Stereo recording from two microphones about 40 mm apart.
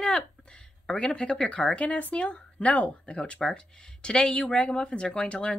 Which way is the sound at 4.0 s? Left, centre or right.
Left.